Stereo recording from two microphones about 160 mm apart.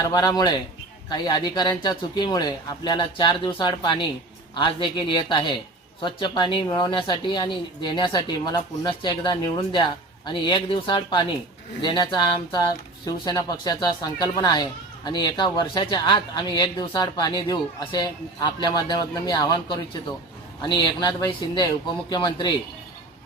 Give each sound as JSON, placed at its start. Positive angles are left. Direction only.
{"t": 0.0, "sound": "speech", "side_deg": 25}